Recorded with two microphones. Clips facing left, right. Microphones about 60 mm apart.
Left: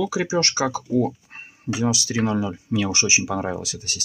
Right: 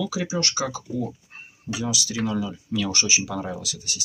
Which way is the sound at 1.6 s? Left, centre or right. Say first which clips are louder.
Left 5 dB; left.